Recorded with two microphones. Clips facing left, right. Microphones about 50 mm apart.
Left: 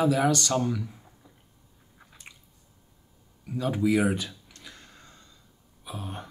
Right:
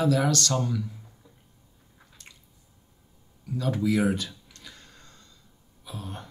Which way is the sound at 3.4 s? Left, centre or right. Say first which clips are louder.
Left 1 dB; centre.